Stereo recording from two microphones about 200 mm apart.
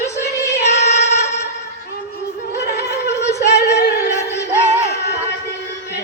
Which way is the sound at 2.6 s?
50° left (ahead or behind).